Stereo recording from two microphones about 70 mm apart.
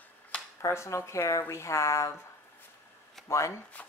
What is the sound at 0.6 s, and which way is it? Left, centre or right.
Speech, left.